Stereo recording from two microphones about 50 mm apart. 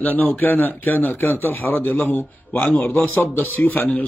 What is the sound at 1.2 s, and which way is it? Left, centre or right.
A man's voice, left.